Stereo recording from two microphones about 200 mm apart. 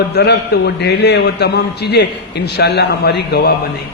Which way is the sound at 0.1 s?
55° left (ahead or behind).